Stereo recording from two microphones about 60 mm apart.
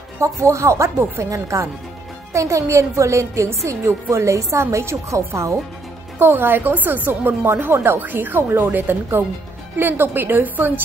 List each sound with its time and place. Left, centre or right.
0.2 s a woman's voice: right
6.1 s speech: right
8.0 s speech: right